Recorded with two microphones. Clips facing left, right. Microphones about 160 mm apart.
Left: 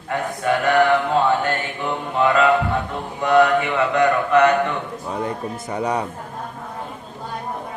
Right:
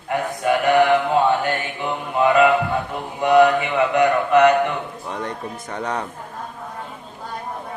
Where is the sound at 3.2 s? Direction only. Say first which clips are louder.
Right 1 dB; 15° right (ahead or behind).